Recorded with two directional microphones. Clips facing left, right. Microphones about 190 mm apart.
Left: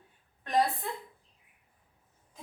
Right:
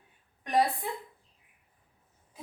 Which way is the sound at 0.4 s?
10° right (ahead or behind).